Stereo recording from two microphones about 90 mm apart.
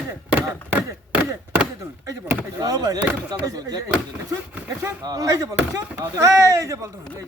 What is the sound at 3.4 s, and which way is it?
Speech, 40° right (ahead or behind).